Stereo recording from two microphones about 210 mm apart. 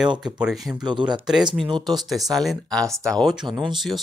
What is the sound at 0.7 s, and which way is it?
Speech, 20° right (ahead or behind).